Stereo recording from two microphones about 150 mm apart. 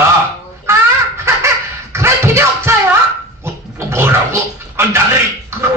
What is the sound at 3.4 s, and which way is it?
Dog, 15° right (ahead or behind).